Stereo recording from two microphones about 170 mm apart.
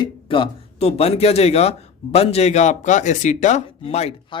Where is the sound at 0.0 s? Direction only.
30° left (ahead or behind); by 3.6 s 45° left (ahead or behind).